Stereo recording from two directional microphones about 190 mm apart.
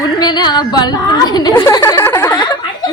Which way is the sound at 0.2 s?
25° left (ahead or behind).